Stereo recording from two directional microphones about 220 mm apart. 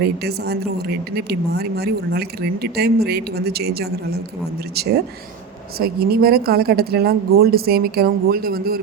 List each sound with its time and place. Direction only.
0.0 s speech: 45° right (ahead or behind)
5.8 s speech: 45° right (ahead or behind)